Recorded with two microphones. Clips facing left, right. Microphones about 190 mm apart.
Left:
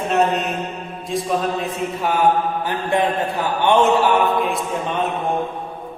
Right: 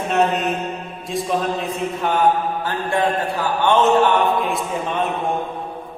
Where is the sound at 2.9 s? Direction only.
20° left (ahead or behind).